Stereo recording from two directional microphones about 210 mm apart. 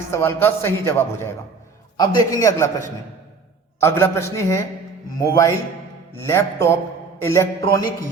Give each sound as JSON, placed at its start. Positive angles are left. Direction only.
{"t": 0.1, "sound": "a man's voice", "side_deg": 10}
{"t": 6.2, "sound": "a man's voice", "side_deg": 10}